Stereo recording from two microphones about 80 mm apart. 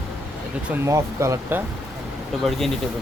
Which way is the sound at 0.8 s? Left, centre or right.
Right.